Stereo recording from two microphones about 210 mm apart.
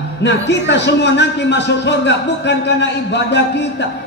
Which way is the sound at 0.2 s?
55° left (ahead or behind).